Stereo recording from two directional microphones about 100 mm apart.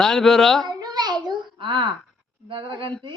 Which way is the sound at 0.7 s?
45° right (ahead or behind).